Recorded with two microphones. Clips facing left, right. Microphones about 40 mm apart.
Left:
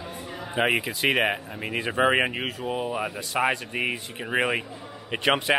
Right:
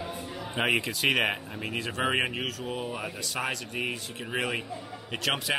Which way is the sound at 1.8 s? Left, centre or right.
Centre.